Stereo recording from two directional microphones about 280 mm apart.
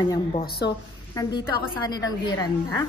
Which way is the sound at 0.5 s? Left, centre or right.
Left.